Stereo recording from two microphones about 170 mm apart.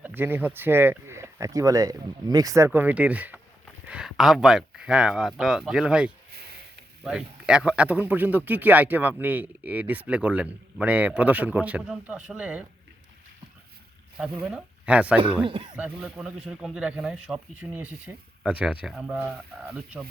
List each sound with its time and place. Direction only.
0.0 s speech: 10° right (ahead or behind)
14.2 s speech: 5° right (ahead or behind)
15.4 s speech: 30° right (ahead or behind)
15.7 s speech: 5° right (ahead or behind)